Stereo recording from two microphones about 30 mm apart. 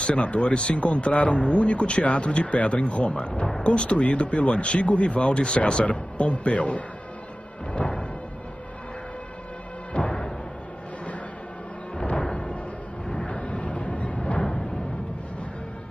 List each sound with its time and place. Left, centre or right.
0.0 s speech: left
5.9 s speech: left
7.8 s music: left
9.9 s music: left
12.0 s music: left
13.3 s a sound: left